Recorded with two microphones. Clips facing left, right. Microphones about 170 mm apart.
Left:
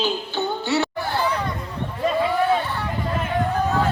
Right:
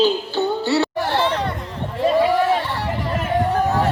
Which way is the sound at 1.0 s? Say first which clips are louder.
Right 4 dB; 90° right.